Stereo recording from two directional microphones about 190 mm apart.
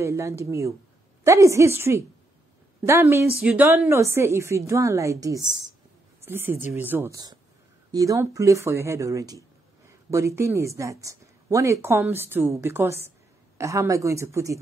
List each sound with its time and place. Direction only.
0.0 s speech: 15° right (ahead or behind)